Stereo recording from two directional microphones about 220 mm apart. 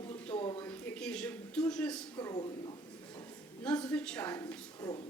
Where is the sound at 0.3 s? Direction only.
20° left (ahead or behind).